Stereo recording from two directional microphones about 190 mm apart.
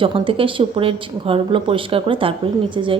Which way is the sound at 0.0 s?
30° right (ahead or behind).